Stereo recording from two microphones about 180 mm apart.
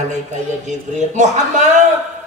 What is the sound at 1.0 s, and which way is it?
Speech, 45° right (ahead or behind).